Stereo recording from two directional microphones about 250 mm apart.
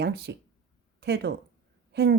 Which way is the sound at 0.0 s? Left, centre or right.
Right.